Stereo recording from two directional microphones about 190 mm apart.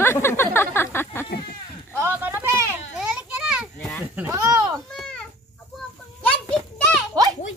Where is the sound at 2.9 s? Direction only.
5° right (ahead or behind).